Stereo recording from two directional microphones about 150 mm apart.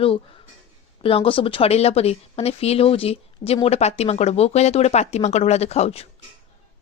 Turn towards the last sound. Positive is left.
turn(degrees=45)  # may be behind; listen again after turning